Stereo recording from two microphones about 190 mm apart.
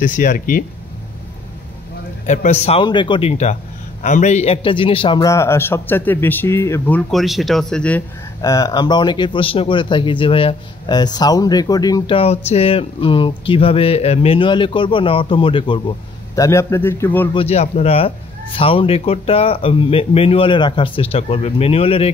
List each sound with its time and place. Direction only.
0.0 s speech: 45° left (ahead or behind)
2.2 s a man's voice: 40° left (ahead or behind); by 7.0 s 15° left (ahead or behind)
7.1 s speech: centre (ahead or behind)
8.4 s speech: 20° left (ahead or behind)
12.2 s speech: 35° left (ahead or behind)
16.3 s a man's voice: 15° left (ahead or behind)
17.3 s a man's voice: 30° left (ahead or behind)